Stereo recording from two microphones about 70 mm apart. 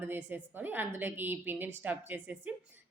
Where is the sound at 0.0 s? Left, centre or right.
Right.